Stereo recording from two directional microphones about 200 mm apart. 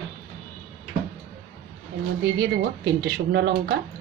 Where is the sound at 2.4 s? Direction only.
60° right (ahead or behind).